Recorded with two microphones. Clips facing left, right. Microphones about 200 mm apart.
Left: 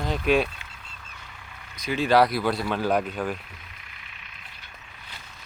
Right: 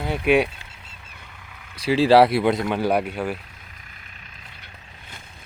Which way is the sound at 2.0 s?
30° right (ahead or behind).